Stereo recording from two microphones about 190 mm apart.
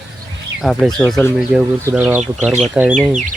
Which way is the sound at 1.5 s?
5° right (ahead or behind).